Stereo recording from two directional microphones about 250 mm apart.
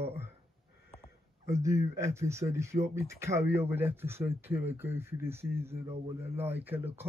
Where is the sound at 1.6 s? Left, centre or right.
Centre.